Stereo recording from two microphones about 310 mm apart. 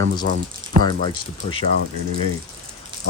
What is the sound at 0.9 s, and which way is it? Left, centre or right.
Speech, centre.